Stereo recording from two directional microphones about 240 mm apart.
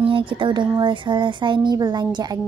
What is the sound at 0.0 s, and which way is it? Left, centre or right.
A woman's voice, right.